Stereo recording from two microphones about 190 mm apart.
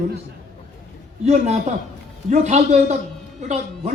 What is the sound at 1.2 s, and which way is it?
A man's voice, 35° right (ahead or behind).